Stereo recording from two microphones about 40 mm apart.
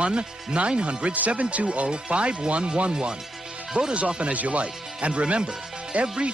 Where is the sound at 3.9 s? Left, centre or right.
Right.